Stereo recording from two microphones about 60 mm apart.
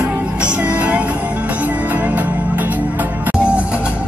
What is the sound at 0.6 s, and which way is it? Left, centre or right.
Music, right.